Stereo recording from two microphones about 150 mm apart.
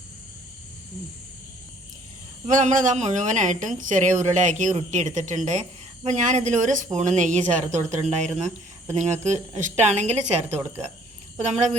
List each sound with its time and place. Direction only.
2.5 s a woman's voice: 55° right (ahead or behind)